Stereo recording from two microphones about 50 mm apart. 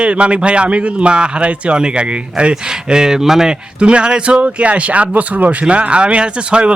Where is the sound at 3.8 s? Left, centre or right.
Right.